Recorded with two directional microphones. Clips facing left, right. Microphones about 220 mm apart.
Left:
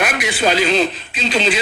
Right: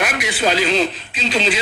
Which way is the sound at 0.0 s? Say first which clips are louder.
Left 2 dB; 55° left (ahead or behind).